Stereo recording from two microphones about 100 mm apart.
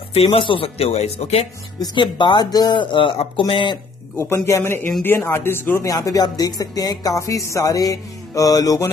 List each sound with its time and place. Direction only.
0.1 s speech: 70° left (ahead or behind); by 1.5 s 90° left
1.8 s speech: 50° left (ahead or behind)
4.2 s speech: 30° left (ahead or behind)
5.9 s speech: 35° left (ahead or behind)